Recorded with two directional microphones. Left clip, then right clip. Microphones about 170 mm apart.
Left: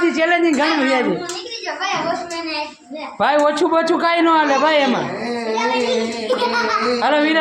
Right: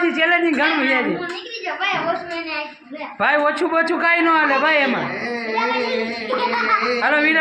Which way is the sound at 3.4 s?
20° left (ahead or behind).